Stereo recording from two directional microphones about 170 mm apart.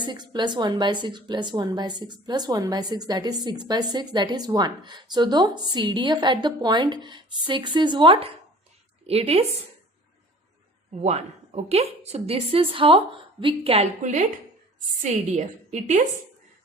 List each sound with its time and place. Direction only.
0.0 s a woman's voice: 25° right (ahead or behind)
11.0 s a woman's voice: 40° right (ahead or behind)
14.0 s a woman's voice: 45° right (ahead or behind)